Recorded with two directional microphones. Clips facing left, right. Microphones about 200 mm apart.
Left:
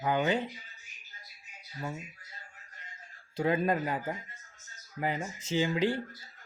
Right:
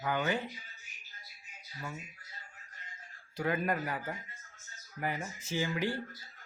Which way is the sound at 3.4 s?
25° left (ahead or behind).